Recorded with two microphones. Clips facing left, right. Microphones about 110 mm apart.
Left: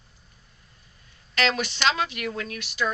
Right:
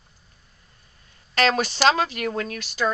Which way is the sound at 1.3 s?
40° right (ahead or behind).